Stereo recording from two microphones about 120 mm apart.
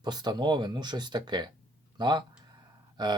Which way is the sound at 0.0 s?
35° right (ahead or behind).